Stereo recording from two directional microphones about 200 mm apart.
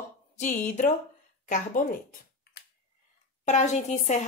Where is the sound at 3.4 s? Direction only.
35° left (ahead or behind).